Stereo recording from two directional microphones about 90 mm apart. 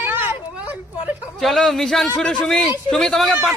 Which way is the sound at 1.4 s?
5° left (ahead or behind).